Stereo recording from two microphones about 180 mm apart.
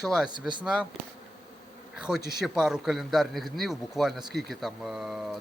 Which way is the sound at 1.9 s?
5° right (ahead or behind).